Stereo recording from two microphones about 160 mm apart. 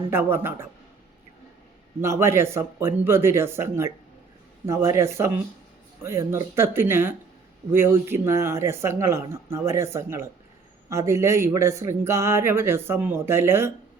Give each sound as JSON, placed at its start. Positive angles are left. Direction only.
{"t": 0.1, "sound": "speech", "side_deg": -15}
{"t": 2.0, "sound": "speech", "side_deg": -15}